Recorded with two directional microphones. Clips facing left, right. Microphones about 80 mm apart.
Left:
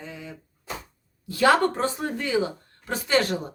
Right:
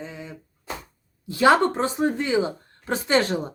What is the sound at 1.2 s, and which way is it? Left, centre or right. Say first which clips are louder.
Speech: right 2 dB; right.